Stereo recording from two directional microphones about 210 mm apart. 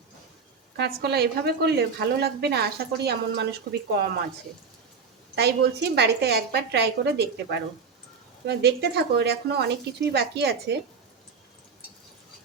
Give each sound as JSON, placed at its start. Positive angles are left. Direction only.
{"t": 0.8, "sound": "a woman's voice", "side_deg": -50}
{"t": 5.3, "sound": "a woman's voice", "side_deg": -50}
{"t": 8.4, "sound": "a woman's voice", "side_deg": -50}